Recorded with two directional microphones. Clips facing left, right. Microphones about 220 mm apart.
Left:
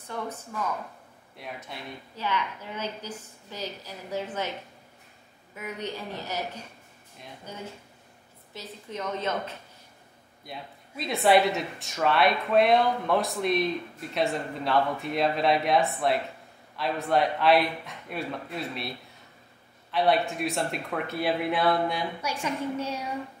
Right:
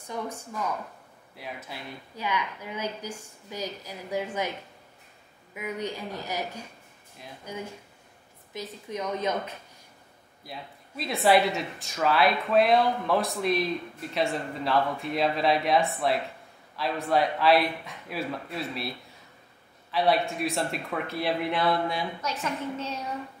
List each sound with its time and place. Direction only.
0.1 s a woman's voice: 10° right (ahead or behind)
2.1 s a woman's voice: 10° right (ahead or behind)
5.5 s a woman's voice: 10° right (ahead or behind)
10.4 s speech: centre (ahead or behind)
22.2 s a sound: 10° left (ahead or behind)